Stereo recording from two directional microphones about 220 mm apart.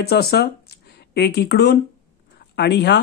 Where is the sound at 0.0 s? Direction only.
45° left (ahead or behind).